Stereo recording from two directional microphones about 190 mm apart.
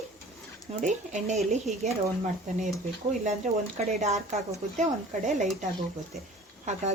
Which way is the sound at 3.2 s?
40° right (ahead or behind).